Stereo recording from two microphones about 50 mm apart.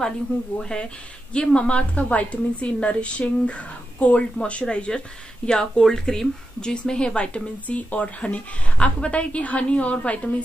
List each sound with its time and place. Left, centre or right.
0.6 s speech: centre